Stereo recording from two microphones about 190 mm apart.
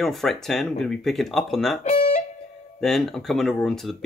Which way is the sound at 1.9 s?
45° left (ahead or behind).